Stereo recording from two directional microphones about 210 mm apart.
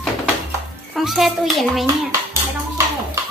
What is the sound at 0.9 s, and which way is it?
Speech, centre (ahead or behind).